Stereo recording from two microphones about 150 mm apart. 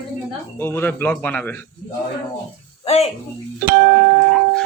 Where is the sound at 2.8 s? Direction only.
45° left (ahead or behind).